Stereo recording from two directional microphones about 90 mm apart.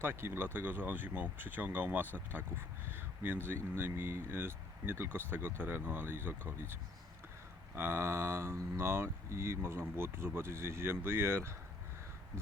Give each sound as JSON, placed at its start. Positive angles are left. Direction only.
{"t": 0.0, "sound": "speech", "side_deg": -25}
{"t": 7.8, "sound": "speech", "side_deg": -25}